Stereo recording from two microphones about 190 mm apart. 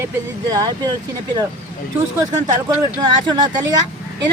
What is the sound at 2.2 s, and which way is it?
Speech, 20° right (ahead or behind).